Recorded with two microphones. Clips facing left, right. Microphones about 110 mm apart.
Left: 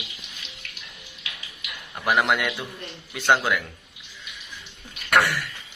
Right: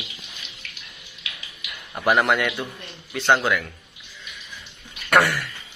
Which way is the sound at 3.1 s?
10° left (ahead or behind).